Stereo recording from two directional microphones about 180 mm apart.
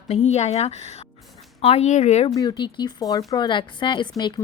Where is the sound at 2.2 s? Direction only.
25° left (ahead or behind).